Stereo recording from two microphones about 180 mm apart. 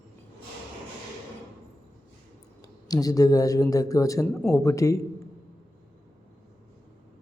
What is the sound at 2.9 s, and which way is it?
A man's voice, 20° left (ahead or behind).